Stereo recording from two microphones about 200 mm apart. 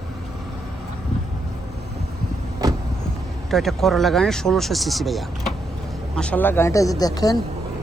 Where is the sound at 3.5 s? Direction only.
Centre (ahead or behind); by 7.3 s 20° left (ahead or behind).